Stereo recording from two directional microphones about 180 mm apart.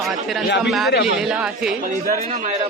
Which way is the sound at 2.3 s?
35° right (ahead or behind).